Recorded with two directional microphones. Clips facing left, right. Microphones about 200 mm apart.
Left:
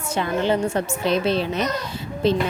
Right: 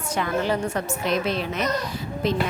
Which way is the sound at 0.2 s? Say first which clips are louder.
Left 3 dB; 25° left (ahead or behind).